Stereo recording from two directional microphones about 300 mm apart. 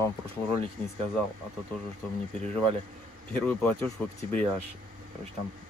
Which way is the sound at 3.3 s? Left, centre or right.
Centre.